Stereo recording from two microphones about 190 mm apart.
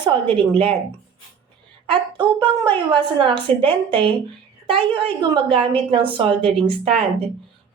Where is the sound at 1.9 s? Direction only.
25° right (ahead or behind).